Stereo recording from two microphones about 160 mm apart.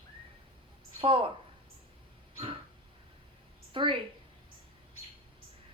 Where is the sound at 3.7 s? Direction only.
30° right (ahead or behind).